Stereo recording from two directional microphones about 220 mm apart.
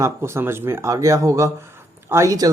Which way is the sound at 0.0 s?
10° right (ahead or behind).